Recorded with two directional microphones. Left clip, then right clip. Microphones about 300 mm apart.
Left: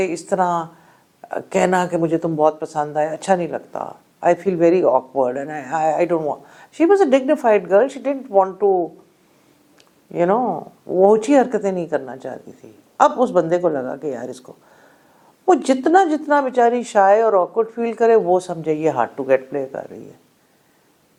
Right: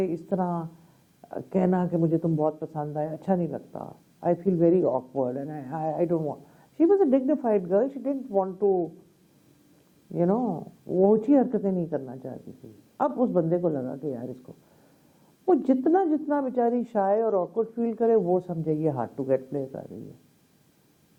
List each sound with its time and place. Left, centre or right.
0.0 s a woman's voice: centre
10.1 s a man's voice: centre